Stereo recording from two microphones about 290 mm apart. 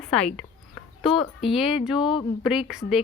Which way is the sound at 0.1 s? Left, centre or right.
Centre.